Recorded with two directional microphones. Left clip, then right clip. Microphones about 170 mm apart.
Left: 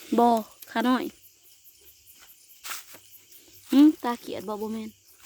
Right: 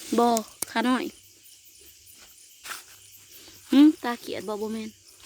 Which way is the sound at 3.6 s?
10° left (ahead or behind).